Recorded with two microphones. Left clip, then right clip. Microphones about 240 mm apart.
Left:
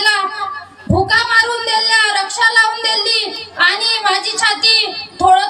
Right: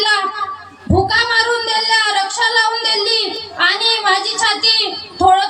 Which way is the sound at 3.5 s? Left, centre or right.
Left.